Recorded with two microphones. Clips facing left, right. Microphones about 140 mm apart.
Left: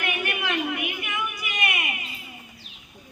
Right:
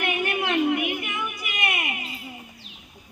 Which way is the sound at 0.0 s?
25° right (ahead or behind).